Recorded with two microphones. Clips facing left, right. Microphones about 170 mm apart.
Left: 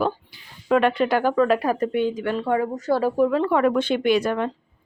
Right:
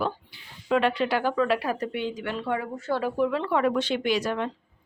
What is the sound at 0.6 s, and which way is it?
Speech, 50° left (ahead or behind).